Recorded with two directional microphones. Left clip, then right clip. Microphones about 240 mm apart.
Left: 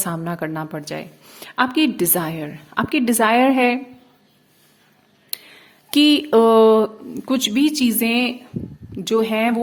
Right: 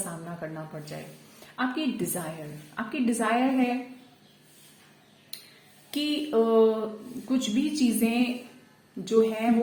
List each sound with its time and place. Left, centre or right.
0.3 s a woman's voice: left
5.9 s a woman's voice: left